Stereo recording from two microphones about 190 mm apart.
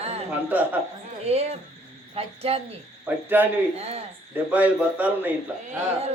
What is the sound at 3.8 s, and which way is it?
Speech, 35° right (ahead or behind).